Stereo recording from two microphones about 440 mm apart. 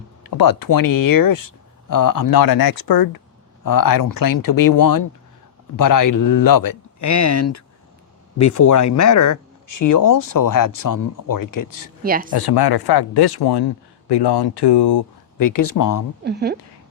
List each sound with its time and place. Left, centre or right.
0.2 s speech: left
12.0 s a woman's voice: centre
12.3 s speech: left
16.2 s a woman's voice: right